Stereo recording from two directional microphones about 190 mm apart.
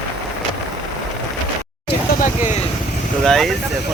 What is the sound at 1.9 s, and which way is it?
Vehicle, 45° left (ahead or behind).